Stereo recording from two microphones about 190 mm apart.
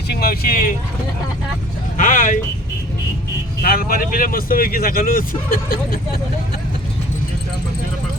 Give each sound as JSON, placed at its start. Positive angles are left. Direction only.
{"t": 0.1, "sound": "speech", "side_deg": 50}
{"t": 2.0, "sound": "speech", "side_deg": 45}
{"t": 3.6, "sound": "speech", "side_deg": 50}